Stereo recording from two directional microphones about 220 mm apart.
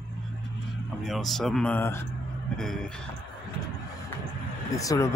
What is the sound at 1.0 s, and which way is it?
Speech, centre (ahead or behind).